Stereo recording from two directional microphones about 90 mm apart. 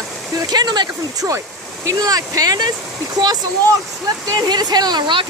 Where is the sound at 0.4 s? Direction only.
50° right (ahead or behind).